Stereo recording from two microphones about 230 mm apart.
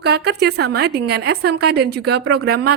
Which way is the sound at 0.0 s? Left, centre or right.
Right.